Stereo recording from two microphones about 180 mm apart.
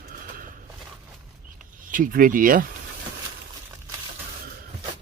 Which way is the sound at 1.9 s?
50° right (ahead or behind).